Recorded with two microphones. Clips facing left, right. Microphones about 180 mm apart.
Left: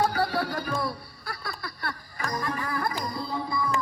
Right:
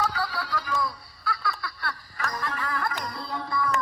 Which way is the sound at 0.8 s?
55° left (ahead or behind).